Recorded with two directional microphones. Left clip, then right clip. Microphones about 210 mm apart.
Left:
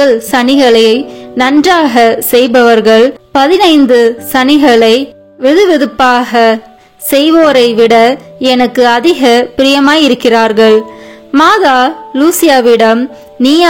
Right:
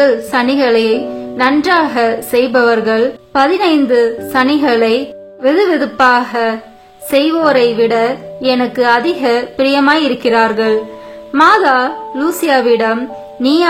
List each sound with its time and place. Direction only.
0.0 s speech: 40° left (ahead or behind)